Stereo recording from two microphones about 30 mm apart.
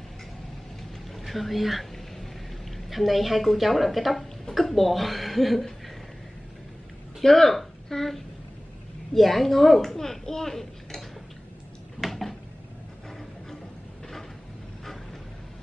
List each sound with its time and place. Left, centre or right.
1.1 s speech: centre
2.9 s speech: centre
7.2 s a child's voice: centre
12.0 s a sound: centre